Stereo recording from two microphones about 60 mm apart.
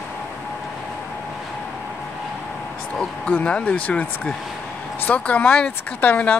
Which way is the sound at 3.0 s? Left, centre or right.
Left.